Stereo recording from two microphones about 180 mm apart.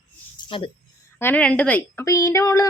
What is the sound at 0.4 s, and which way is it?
Speech, 30° left (ahead or behind).